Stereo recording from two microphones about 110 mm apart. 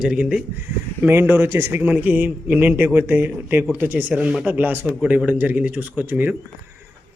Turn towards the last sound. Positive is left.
turn(degrees=-20)  # may be behind; listen again after turning